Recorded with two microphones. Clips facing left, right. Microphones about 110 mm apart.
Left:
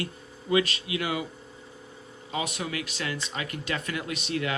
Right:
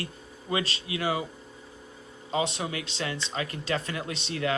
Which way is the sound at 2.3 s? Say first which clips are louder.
Right 3 dB; 30° right (ahead or behind).